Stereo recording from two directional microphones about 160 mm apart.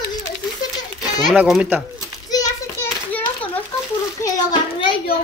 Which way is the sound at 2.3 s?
15° left (ahead or behind).